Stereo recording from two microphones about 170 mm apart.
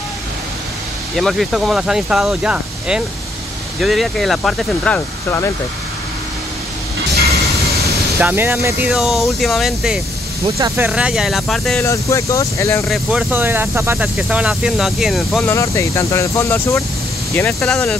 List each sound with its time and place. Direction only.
1.1 s speech: centre (ahead or behind)
8.2 s speech: 10° right (ahead or behind)
11.8 s speech: 15° left (ahead or behind)
12.8 s speech: centre (ahead or behind)
13.3 s speech: 10° right (ahead or behind)
15.4 s speech: 15° left (ahead or behind)
17.5 s speech: 5° left (ahead or behind)